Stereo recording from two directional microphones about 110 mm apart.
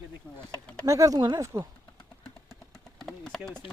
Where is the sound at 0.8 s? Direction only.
30° right (ahead or behind).